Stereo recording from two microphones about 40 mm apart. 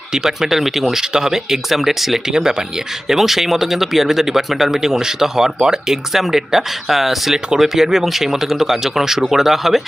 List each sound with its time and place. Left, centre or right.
0.1 s speech: centre
2.3 s speech: centre
3.1 s speech: centre